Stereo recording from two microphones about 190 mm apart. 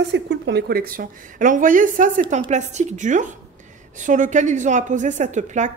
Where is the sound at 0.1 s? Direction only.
65° right (ahead or behind).